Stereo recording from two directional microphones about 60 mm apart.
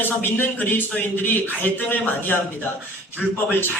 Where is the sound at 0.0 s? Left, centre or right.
Left.